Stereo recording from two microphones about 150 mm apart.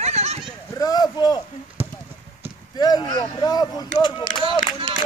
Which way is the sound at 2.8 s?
25° left (ahead or behind).